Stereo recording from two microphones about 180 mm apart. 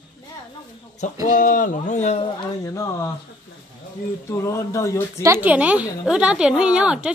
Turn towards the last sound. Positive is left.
turn(degrees=-5)  # may be behind; listen again after turning